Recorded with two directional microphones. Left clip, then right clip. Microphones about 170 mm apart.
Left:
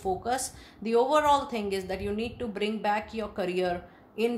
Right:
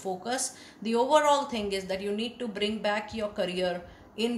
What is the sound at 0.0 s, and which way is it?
A woman's voice, 40° left (ahead or behind).